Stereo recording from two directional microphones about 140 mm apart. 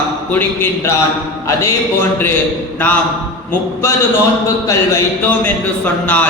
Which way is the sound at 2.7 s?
15° left (ahead or behind).